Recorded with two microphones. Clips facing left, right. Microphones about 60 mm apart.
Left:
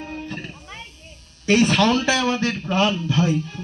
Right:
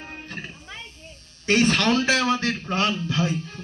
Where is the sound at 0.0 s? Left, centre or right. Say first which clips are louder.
Left 6 dB; centre.